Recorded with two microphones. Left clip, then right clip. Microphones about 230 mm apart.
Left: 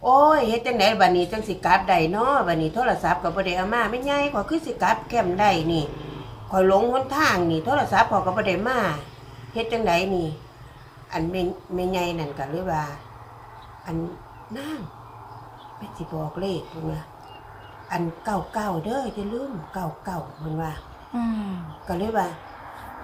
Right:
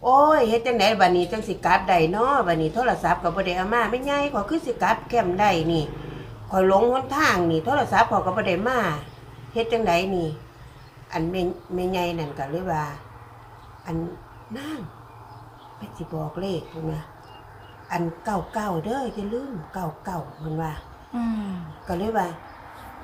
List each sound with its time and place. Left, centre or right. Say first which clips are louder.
0.0 s a woman's voice: even; centre
14.5 s a woman's voice: left 1 dB; centre
16.0 s a woman's voice: left 1 dB; centre